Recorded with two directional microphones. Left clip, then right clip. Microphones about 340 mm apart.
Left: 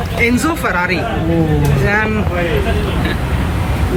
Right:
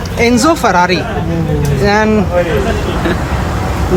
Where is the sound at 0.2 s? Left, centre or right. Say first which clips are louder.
Right 5 dB; centre.